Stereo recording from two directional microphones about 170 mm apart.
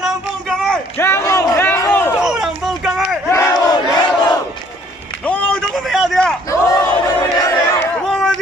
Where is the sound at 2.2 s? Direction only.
Centre (ahead or behind).